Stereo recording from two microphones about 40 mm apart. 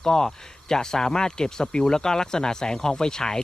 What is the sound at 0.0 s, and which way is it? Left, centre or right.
Speech, centre.